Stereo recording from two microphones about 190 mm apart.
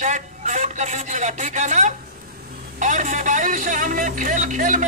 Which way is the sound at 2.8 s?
40° right (ahead or behind).